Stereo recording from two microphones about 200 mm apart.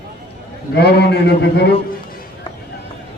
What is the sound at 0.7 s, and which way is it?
A man's voice, 55° left (ahead or behind).